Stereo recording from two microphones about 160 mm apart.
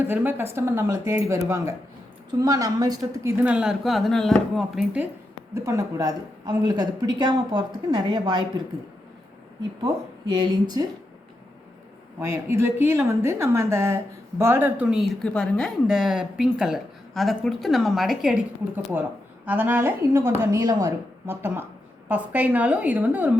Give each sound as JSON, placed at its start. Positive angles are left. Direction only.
{"t": 0.1, "sound": "a woman's voice", "side_deg": -15}
{"t": 3.3, "sound": "speech", "side_deg": -5}
{"t": 5.5, "sound": "a woman's voice", "side_deg": -20}
{"t": 9.8, "sound": "a woman's voice", "side_deg": -25}
{"t": 12.2, "sound": "speech", "side_deg": -15}
{"t": 19.5, "sound": "a woman's voice", "side_deg": -10}